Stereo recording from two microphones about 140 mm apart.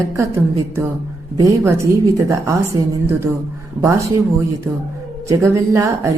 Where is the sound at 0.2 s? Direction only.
20° right (ahead or behind).